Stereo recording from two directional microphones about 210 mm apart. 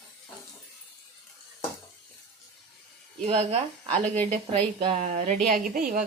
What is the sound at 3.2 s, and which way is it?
Speech, 30° right (ahead or behind).